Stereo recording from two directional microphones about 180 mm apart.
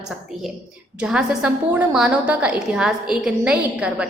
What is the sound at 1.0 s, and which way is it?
A woman's voice, 5° right (ahead or behind).